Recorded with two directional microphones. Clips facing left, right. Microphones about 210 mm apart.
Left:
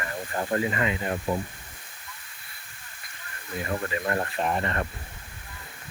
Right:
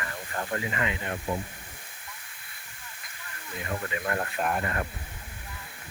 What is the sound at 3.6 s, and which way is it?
Speech, 35° left (ahead or behind).